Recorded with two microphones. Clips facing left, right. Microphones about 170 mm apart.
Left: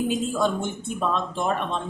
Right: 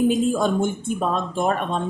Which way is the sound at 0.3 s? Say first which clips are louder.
Right 3 dB; 50° right (ahead or behind).